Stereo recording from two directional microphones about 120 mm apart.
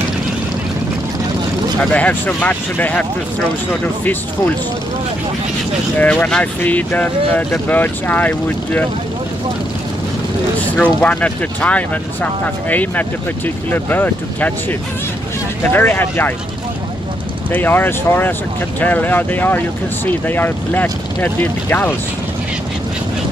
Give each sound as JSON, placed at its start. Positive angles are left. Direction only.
{"t": 1.9, "sound": "speech", "side_deg": 10}
{"t": 5.9, "sound": "speech", "side_deg": 10}
{"t": 10.6, "sound": "speech", "side_deg": 10}
{"t": 17.5, "sound": "speech", "side_deg": 15}